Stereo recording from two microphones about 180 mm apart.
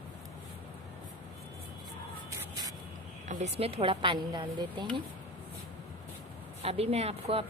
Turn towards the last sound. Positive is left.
turn(degrees=-35)  # may be behind; listen again after turning